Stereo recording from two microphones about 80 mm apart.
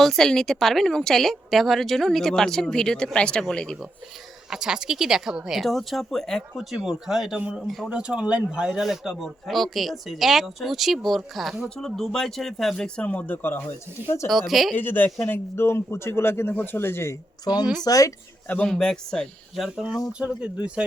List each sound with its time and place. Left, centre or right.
0.0 s speech: centre
4.4 s speech: centre
7.9 s speech: centre
13.1 s speech: centre
14.3 s speech: centre
14.8 s a man's voice: left
17.4 s speech: left
18.4 s speech: centre
18.7 s speech: centre
20.1 s speech: centre